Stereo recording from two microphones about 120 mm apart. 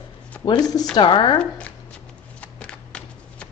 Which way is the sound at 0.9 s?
45° left (ahead or behind).